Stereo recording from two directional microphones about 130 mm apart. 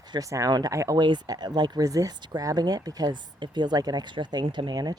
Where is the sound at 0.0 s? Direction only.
30° right (ahead or behind).